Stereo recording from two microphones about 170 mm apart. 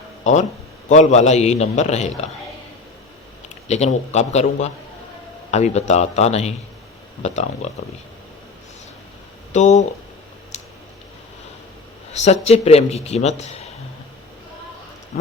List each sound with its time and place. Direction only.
0.9 s a man's voice: 40° left (ahead or behind)
3.7 s a man's voice: 40° left (ahead or behind)
9.5 s speech: 45° left (ahead or behind)
12.1 s a man's voice: 40° left (ahead or behind)